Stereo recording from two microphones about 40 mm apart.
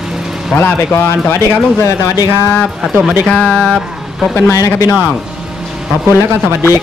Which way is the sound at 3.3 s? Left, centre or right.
Left.